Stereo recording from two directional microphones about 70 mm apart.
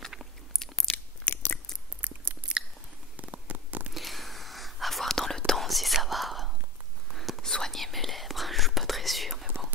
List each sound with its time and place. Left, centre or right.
0.1 s crunch: centre
0.9 s chewing: left
2.0 s chewing: right
3.2 s a sound: right
3.9 s whispering: centre